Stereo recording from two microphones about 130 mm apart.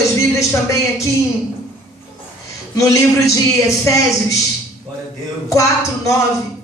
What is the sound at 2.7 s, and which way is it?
A man's voice, 25° left (ahead or behind).